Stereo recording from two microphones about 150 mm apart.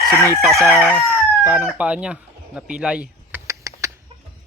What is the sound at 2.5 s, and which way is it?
Speech, 5° right (ahead or behind).